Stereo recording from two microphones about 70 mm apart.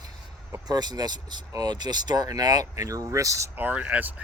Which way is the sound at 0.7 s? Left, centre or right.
Right.